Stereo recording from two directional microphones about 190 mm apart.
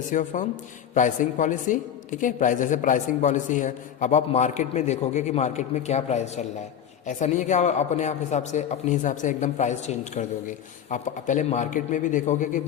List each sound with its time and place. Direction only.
0.1 s a man's voice: 40° left (ahead or behind)